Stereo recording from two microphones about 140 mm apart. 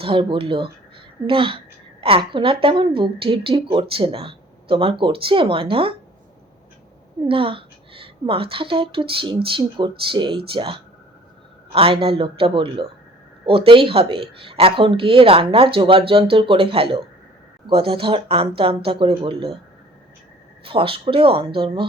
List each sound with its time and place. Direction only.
0.0 s a woman's voice: 40° right (ahead or behind)
7.3 s a woman's voice: 40° right (ahead or behind)
20.7 s a woman's voice: 40° right (ahead or behind)